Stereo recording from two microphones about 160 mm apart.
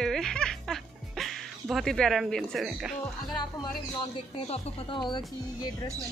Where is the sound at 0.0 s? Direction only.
5° left (ahead or behind).